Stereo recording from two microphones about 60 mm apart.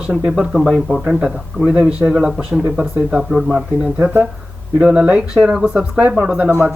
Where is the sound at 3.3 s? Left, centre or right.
Centre.